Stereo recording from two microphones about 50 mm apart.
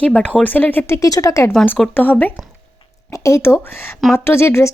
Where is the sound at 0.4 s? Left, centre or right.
Left.